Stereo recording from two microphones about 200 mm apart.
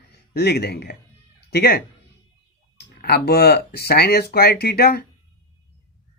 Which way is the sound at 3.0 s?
55° left (ahead or behind).